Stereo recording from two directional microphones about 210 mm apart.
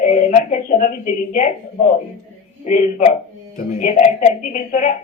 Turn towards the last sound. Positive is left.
turn(degrees=40)  # may be behind; listen again after turning